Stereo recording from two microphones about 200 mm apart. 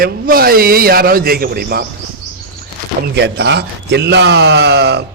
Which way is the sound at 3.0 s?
55° right (ahead or behind).